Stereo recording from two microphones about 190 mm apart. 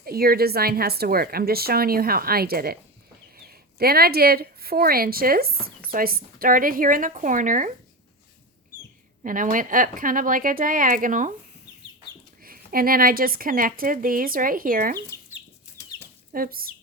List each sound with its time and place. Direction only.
0.0 s speech: 50° right (ahead or behind)
9.2 s speech: 45° right (ahead or behind)
12.4 s speech: 50° right (ahead or behind)
16.3 s speech: 50° right (ahead or behind)